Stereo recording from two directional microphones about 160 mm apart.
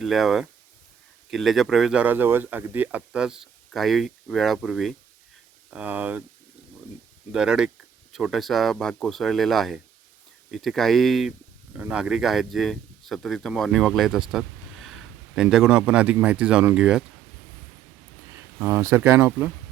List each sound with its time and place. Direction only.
0.0 s speech: centre (ahead or behind)
7.3 s speech: 5° right (ahead or behind)
18.6 s speech: 15° right (ahead or behind)